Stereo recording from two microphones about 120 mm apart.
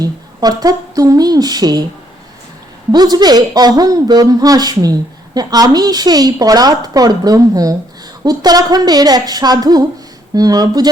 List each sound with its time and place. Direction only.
0.0 s a woman's voice: 30° right (ahead or behind)
2.9 s a woman's voice: 35° right (ahead or behind)